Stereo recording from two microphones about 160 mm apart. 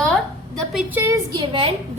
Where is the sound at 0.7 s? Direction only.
10° right (ahead or behind).